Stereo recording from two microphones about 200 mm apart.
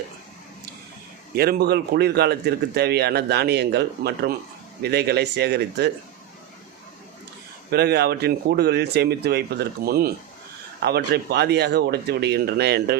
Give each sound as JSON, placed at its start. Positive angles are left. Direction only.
{"t": 1.4, "sound": "a man's voice", "side_deg": -50}
{"t": 7.7, "sound": "a man's voice", "side_deg": -55}